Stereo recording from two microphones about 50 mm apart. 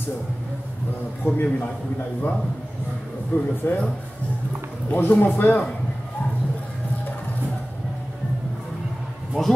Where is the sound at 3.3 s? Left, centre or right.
Left.